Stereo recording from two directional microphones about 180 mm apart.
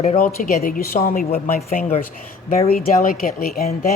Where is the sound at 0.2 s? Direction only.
50° left (ahead or behind).